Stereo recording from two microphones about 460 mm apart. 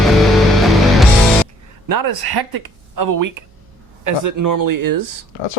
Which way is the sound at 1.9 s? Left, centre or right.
Right.